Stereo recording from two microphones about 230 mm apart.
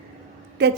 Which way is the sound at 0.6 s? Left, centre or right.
Right.